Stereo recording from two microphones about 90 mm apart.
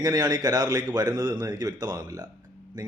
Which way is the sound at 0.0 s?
50° right (ahead or behind).